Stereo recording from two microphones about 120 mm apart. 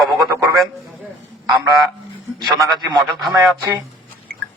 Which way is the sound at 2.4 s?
40° right (ahead or behind).